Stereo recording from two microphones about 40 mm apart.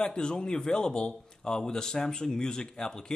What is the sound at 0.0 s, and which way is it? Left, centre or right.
A man's voice, centre.